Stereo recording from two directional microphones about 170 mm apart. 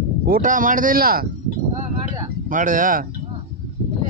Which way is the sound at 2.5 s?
50° right (ahead or behind).